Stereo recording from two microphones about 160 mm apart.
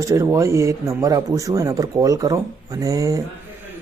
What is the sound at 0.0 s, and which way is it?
Speech, 20° right (ahead or behind).